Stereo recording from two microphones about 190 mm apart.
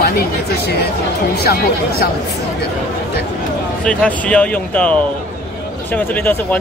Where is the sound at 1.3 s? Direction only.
55° left (ahead or behind).